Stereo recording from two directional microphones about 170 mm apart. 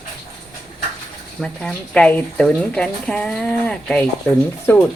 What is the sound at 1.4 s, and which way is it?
Speech, 5° left (ahead or behind).